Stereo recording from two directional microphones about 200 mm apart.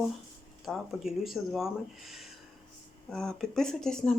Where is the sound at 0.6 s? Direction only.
Centre (ahead or behind).